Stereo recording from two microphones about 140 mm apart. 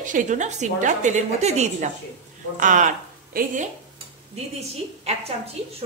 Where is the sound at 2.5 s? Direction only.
65° right (ahead or behind).